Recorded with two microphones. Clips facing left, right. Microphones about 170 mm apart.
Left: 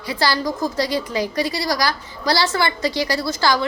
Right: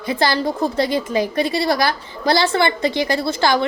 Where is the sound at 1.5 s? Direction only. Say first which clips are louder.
Right 4 dB; 25° right (ahead or behind).